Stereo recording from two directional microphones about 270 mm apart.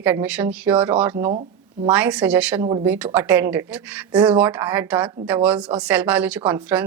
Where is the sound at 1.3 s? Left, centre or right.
Right.